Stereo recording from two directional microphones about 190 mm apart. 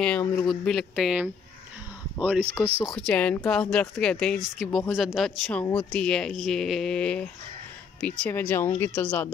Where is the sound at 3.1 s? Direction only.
5° left (ahead or behind).